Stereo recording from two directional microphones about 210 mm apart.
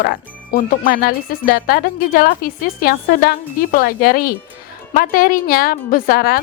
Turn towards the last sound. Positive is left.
turn(degrees=45)  # may be behind; listen again after turning